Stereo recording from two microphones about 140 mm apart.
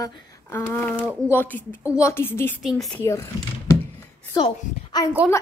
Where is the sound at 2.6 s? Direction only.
Centre (ahead or behind).